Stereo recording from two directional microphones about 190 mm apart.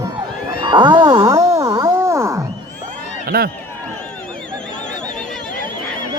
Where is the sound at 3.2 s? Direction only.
55° right (ahead or behind).